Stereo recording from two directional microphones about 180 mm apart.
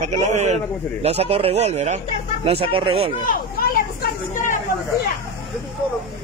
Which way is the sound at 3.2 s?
55° left (ahead or behind).